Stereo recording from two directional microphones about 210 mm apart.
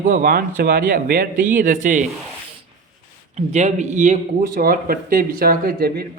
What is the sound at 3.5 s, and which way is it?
Speech, 35° right (ahead or behind).